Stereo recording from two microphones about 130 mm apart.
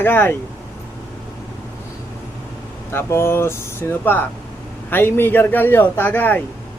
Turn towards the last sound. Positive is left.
turn(degrees=15)  # may be behind; listen again after turning